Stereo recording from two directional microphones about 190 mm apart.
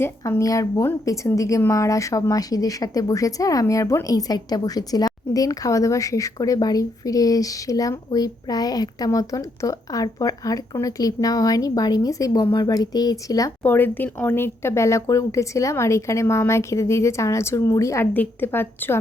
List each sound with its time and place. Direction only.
0.0 s a woman's voice: 15° left (ahead or behind)